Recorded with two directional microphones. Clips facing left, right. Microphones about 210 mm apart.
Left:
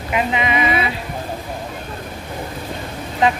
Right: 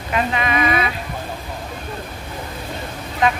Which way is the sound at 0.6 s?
5° left (ahead or behind).